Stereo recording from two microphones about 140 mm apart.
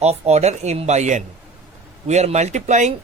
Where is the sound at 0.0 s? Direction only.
50° right (ahead or behind).